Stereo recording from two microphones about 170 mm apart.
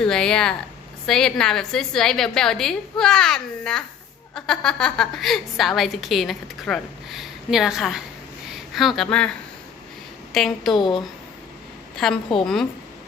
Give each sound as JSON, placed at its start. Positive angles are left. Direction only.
{"t": 0.0, "sound": "a woman's voice", "side_deg": 5}
{"t": 10.3, "sound": "a woman's voice", "side_deg": 0}
{"t": 10.8, "sound": "speech", "side_deg": 25}
{"t": 11.9, "sound": "a woman's voice", "side_deg": 5}